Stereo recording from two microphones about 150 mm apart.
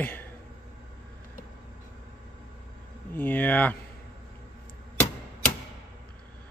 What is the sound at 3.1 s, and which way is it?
Speech, 10° left (ahead or behind).